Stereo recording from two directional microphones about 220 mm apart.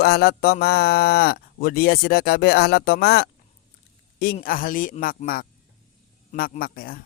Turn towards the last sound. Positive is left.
turn(degrees=40)  # may be behind; listen again after turning